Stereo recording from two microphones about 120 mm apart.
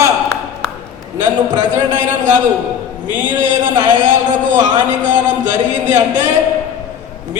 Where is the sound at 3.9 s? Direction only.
90° right.